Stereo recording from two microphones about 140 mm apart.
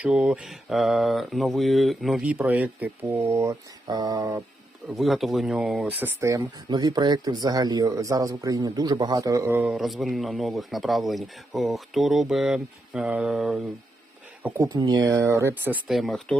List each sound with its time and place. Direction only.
0.0 s speech: 5° right (ahead or behind); by 4.4 s 25° right (ahead or behind)
4.9 s speech: centre (ahead or behind); by 6.5 s 20° right (ahead or behind)
6.7 s speech: 30° right (ahead or behind)
9.6 s speech: centre (ahead or behind)
14.4 s speech: 15° right (ahead or behind)
14.7 s speech: 30° right (ahead or behind)
15.9 s speech: centre (ahead or behind)